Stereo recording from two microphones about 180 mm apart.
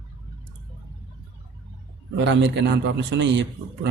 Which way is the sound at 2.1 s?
85° right.